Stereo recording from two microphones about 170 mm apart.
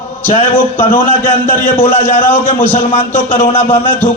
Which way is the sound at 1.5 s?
55° left (ahead or behind).